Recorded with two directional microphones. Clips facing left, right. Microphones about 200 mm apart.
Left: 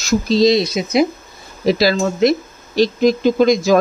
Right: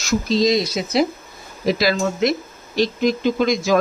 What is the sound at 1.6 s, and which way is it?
Speech, 35° left (ahead or behind).